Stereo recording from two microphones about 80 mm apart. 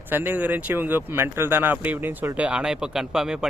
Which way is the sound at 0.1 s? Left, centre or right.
Right.